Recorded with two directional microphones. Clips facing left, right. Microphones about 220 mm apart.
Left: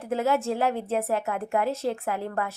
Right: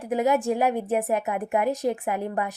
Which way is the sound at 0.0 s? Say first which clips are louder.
Right 2 dB; 15° right (ahead or behind).